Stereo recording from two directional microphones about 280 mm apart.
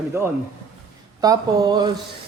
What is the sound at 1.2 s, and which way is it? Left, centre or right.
Speech, centre.